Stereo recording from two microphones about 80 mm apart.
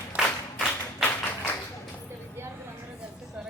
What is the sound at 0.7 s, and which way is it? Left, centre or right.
Tap, left.